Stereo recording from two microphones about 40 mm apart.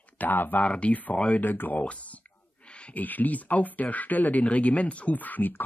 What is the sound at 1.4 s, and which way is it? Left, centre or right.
Speech, left.